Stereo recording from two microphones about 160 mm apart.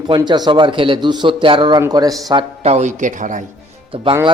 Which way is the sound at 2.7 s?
50° right (ahead or behind).